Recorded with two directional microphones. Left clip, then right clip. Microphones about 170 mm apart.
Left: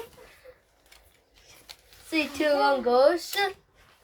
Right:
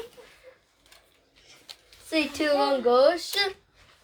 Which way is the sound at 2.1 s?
60° right (ahead or behind).